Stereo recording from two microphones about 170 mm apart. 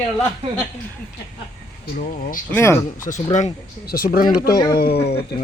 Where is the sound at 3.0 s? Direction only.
45° left (ahead or behind).